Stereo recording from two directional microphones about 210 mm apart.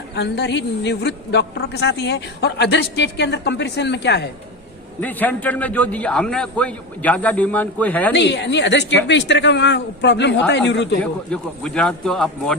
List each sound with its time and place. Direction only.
0.2 s a woman's voice: 55° left (ahead or behind)
4.9 s a man's voice: 10° left (ahead or behind)
8.1 s a woman's voice: 55° left (ahead or behind)
11.0 s a man's voice: 5° left (ahead or behind)